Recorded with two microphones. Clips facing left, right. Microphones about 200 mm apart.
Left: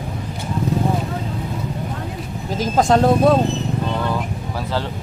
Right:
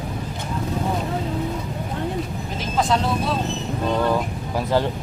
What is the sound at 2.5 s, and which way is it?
Speech, 45° left (ahead or behind).